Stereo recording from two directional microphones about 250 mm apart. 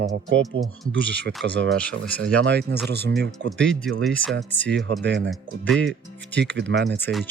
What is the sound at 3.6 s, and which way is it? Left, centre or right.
Speech, centre.